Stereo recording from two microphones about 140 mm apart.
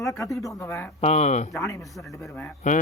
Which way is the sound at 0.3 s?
20° left (ahead or behind).